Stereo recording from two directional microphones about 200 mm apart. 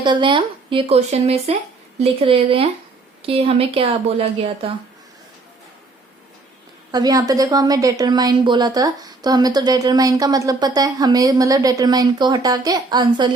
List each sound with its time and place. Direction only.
0.0 s a woman's voice: 25° right (ahead or behind)
6.9 s a woman's voice: 20° right (ahead or behind)